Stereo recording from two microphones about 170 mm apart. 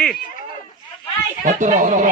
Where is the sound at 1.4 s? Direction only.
50° right (ahead or behind).